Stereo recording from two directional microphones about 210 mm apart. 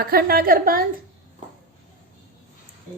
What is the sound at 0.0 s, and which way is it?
Speech, 45° right (ahead or behind).